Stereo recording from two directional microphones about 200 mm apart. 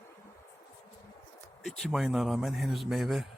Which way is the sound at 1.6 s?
Centre (ahead or behind).